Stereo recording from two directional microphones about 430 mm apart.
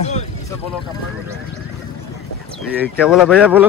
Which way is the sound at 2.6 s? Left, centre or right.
Centre.